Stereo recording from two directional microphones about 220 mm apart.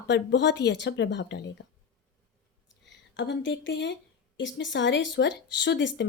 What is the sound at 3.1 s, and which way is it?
Speech, 55° left (ahead or behind).